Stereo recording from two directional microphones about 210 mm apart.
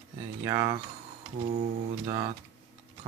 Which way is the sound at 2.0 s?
20° right (ahead or behind).